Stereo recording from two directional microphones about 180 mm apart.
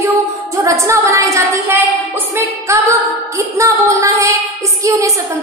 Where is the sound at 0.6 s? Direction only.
15° right (ahead or behind).